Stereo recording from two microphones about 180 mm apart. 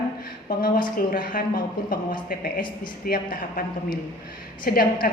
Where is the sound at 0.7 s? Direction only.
25° left (ahead or behind).